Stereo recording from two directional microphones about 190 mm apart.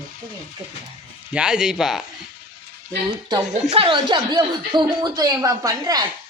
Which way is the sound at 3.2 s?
20° right (ahead or behind).